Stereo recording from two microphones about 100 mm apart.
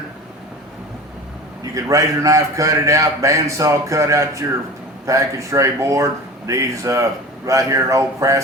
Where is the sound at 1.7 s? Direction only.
35° right (ahead or behind).